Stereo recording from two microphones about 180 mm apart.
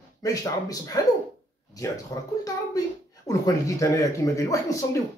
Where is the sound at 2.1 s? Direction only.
20° left (ahead or behind).